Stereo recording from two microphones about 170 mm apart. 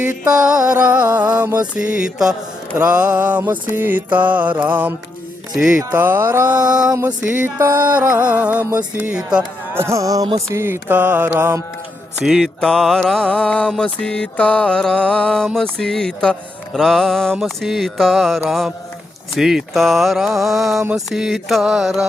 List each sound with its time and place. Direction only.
0.3 s music: 5° right (ahead or behind)
5.5 s mantra: 5° right (ahead or behind)
5.9 s music: 10° right (ahead or behind)
12.2 s mantra: centre (ahead or behind)